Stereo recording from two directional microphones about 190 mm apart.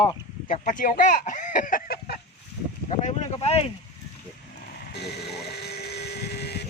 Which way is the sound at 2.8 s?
35° left (ahead or behind).